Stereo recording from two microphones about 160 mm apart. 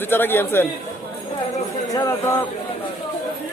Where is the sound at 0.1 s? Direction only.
15° left (ahead or behind).